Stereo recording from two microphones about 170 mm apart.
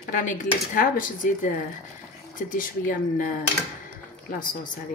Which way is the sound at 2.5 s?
55° left (ahead or behind).